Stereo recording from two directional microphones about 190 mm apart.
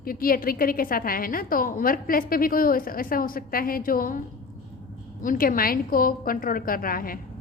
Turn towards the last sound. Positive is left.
turn(degrees=50)  # may be behind; listen again after turning